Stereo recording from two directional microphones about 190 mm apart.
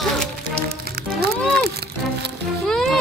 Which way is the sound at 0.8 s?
55° right (ahead or behind).